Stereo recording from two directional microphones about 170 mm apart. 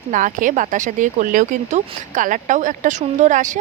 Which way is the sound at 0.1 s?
50° right (ahead or behind).